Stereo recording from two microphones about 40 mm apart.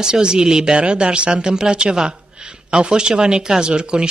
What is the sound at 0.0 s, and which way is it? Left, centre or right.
Speech, centre.